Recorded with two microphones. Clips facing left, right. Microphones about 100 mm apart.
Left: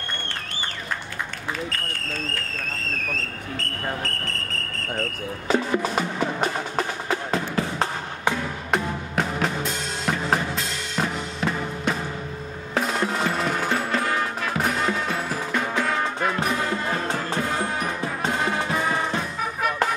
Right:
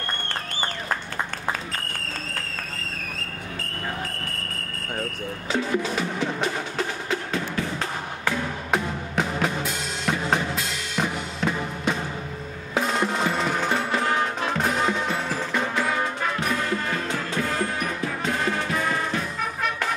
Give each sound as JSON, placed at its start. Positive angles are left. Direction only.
{"t": 5.5, "sound": "music", "side_deg": 50}
{"t": 7.2, "sound": "music", "side_deg": 35}
{"t": 8.7, "sound": "drum", "side_deg": 0}
{"t": 12.8, "sound": "percussion", "side_deg": 0}
{"t": 14.9, "sound": "music", "side_deg": 0}
{"t": 16.9, "sound": "music", "side_deg": 30}
{"t": 17.6, "sound": "music", "side_deg": 20}